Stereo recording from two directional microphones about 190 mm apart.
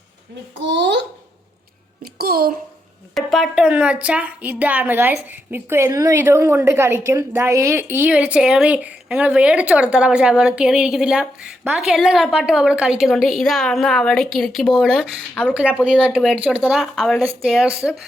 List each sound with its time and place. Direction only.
0.6 s a child's voice: 65° right (ahead or behind)
2.0 s a child's voice: 55° right (ahead or behind)
3.2 s a woman's voice: centre (ahead or behind)
15.5 s a woman's voice: 5° right (ahead or behind)